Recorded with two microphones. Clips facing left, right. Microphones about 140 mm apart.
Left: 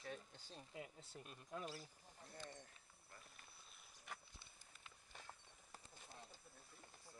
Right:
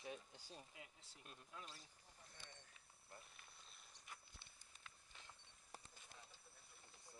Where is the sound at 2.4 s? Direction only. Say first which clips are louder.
Left 10 dB; 45° left (ahead or behind).